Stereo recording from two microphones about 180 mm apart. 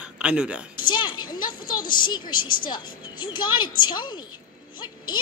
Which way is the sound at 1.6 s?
50° left (ahead or behind).